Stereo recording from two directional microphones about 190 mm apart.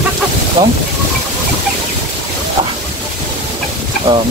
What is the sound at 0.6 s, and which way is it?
Speech, 20° right (ahead or behind).